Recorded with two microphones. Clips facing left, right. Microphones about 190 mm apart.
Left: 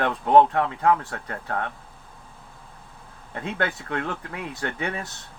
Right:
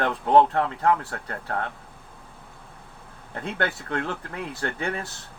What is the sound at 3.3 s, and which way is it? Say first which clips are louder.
Speech: even; 15° left (ahead or behind).